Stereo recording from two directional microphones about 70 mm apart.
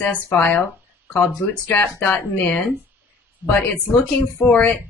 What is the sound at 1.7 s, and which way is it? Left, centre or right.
Speech, left.